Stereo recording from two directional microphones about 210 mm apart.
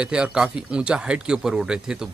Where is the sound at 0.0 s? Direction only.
5° right (ahead or behind).